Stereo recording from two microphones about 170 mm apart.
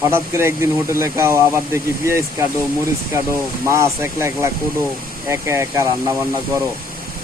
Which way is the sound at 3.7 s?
15° right (ahead or behind).